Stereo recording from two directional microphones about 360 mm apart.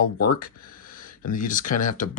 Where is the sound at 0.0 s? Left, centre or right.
Left.